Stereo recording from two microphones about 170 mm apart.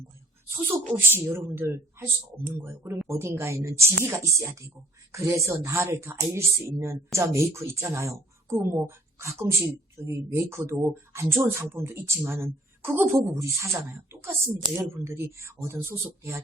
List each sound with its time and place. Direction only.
0.9 s a woman's voice: 15° right (ahead or behind)